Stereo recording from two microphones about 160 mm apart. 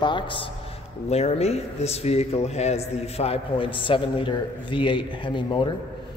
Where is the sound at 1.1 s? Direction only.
40° left (ahead or behind).